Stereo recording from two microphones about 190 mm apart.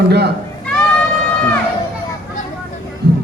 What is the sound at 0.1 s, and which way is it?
Speech, 60° right (ahead or behind).